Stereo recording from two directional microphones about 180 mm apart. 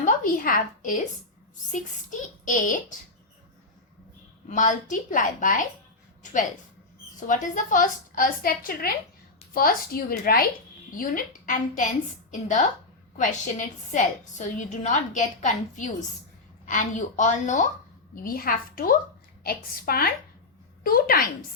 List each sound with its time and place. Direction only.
0.0 s a woman's voice: 50° left (ahead or behind)
4.4 s a woman's voice: 45° left (ahead or behind)
7.2 s a woman's voice: 45° left (ahead or behind)